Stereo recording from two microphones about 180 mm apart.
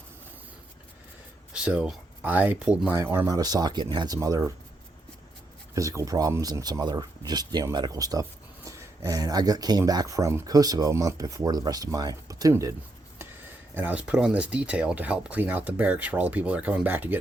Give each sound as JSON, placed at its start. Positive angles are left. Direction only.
{"t": 1.5, "sound": "speech", "side_deg": -5}
{"t": 5.7, "sound": "speech", "side_deg": -15}
{"t": 13.7, "sound": "speech", "side_deg": -10}